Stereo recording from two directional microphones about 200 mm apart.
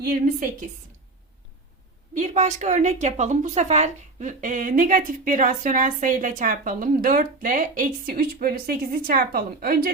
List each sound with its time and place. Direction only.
0.0 s a woman's voice: 45° right (ahead or behind)
2.1 s a woman's voice: 35° right (ahead or behind)